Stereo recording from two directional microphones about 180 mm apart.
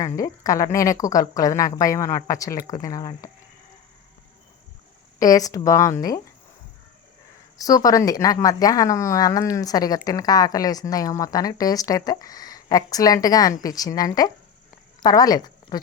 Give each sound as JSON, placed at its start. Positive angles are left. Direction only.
{"t": 0.2, "sound": "a woman's voice", "side_deg": 20}
{"t": 5.2, "sound": "a woman's voice", "side_deg": 20}
{"t": 7.6, "sound": "a woman's voice", "side_deg": 20}